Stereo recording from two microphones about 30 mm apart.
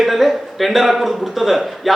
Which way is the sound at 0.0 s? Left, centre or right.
Centre.